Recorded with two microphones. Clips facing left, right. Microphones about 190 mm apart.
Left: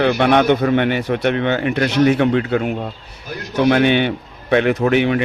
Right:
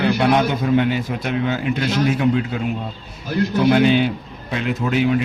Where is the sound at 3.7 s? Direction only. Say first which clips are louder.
Left 1 dB; 65° left (ahead or behind).